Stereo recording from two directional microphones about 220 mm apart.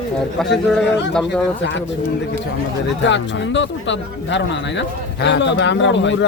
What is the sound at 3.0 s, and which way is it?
Speech, 55° left (ahead or behind).